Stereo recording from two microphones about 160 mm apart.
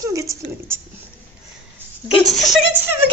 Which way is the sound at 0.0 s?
20° right (ahead or behind).